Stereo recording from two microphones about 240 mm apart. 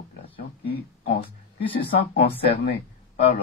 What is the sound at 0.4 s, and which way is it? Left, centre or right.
Speech, left.